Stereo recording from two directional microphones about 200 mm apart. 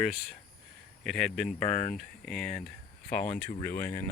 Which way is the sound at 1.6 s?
40° left (ahead or behind).